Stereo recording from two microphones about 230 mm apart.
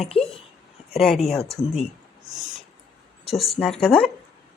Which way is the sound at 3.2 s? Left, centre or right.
Centre.